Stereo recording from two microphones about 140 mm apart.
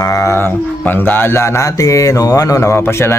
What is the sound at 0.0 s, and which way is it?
Speech, 25° left (ahead or behind).